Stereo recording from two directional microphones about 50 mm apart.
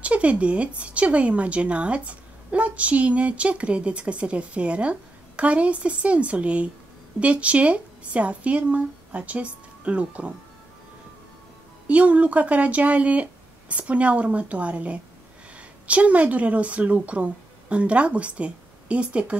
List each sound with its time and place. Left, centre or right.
0.0 s a woman's voice: right
11.9 s a woman's voice: right